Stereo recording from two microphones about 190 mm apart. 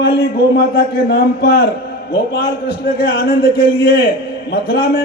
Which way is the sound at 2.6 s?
60° left (ahead or behind).